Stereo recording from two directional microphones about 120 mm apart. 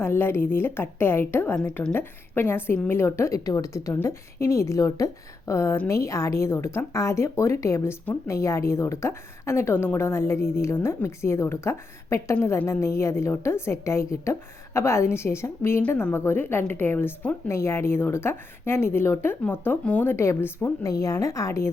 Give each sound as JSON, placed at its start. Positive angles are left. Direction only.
{"t": 0.0, "sound": "speech", "side_deg": 20}